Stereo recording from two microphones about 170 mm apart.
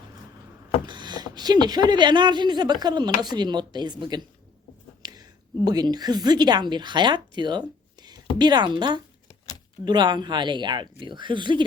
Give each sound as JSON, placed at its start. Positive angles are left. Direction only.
{"t": 0.9, "sound": "a woman's voice", "side_deg": -25}